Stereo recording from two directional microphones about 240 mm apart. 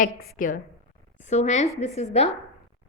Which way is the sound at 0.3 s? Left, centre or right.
Left.